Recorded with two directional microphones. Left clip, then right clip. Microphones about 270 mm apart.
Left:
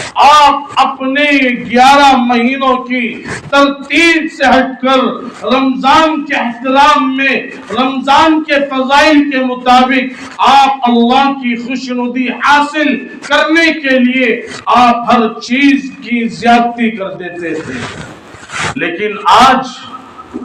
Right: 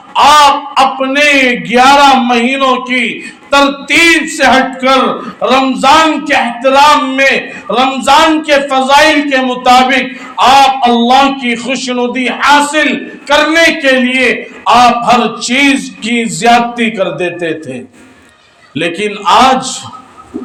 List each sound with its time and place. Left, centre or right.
0.2 s a sound: right
1.0 s a man's voice: right
18.8 s a man's voice: right